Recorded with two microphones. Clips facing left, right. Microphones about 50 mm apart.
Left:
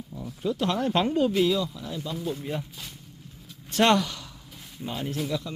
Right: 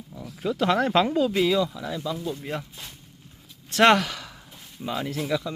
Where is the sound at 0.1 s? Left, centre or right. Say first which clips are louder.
Even; centre.